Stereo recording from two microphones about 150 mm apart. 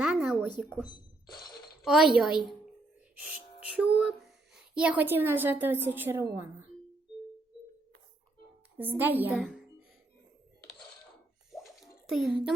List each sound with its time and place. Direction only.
0.0 s a sound: 5° right (ahead or behind)
0.9 s speech: 30° left (ahead or behind)
1.8 s a woman's voice: centre (ahead or behind)
3.2 s music: 5° right (ahead or behind)
3.9 s a woman's voice: 5° right (ahead or behind)
8.8 s a woman's voice: 10° right (ahead or behind)
9.4 s speech: centre (ahead or behind)
11.5 s music: centre (ahead or behind)